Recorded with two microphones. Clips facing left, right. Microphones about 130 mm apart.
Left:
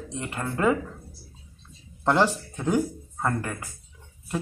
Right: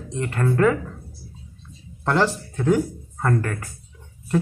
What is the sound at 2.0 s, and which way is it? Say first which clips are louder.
Speech: right 1 dB; 15° left (ahead or behind).